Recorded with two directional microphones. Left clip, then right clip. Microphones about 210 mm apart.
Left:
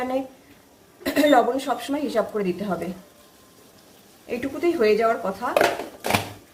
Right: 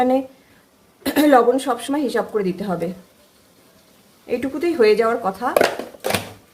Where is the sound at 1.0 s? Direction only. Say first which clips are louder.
Right 4 dB; 50° right (ahead or behind).